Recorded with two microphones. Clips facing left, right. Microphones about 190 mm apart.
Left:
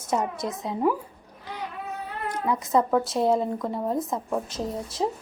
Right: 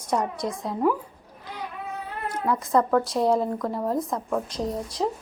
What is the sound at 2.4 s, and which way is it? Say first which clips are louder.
A woman's voice: right 1 dB; centre (ahead or behind).